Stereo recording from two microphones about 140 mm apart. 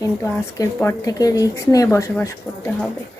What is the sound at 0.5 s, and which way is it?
Speech, 20° left (ahead or behind).